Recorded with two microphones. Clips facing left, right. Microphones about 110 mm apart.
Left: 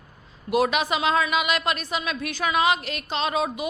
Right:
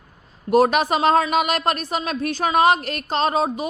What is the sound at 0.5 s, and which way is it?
A woman's voice, 40° right (ahead or behind).